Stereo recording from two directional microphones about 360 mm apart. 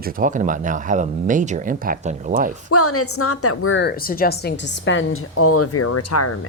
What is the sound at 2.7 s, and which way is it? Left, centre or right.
A woman's voice, left.